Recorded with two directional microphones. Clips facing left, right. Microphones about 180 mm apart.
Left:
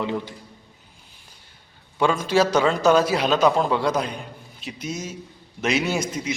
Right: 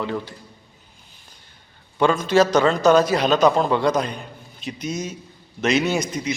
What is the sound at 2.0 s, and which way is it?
A man's voice, 10° left (ahead or behind).